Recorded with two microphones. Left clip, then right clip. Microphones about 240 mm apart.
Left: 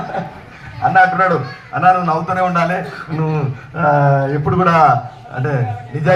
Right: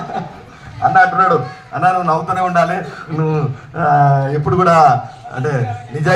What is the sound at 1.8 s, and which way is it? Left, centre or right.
A man's voice, right.